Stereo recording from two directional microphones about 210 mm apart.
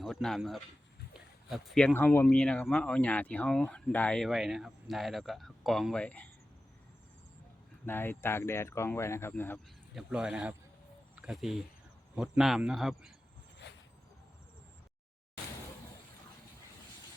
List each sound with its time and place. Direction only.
0.0 s speech: centre (ahead or behind)
7.9 s speech: 10° left (ahead or behind)
9.9 s speech: 5° right (ahead or behind)
13.6 s vehicle: 55° left (ahead or behind)